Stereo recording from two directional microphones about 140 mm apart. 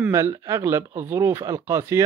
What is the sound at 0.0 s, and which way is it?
Speech, 20° right (ahead or behind).